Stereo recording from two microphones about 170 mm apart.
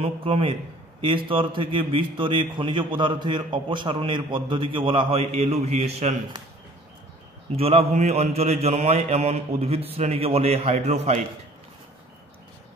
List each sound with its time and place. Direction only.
0.0 s a man's voice: 35° right (ahead or behind)
7.5 s a man's voice: 35° right (ahead or behind)